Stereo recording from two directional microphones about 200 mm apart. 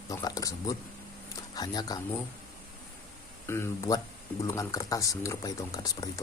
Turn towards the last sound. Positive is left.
turn(degrees=20)  # may be behind; listen again after turning